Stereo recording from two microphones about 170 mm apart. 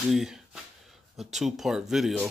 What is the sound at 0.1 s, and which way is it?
Speech, centre (ahead or behind).